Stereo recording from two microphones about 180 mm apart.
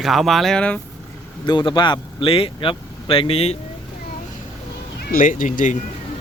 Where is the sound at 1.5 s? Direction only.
25° left (ahead or behind).